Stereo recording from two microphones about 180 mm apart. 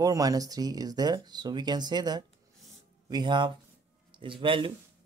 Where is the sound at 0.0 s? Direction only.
20° right (ahead or behind).